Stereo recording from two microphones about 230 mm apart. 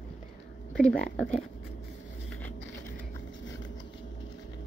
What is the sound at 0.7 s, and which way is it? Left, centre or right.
Speech, centre.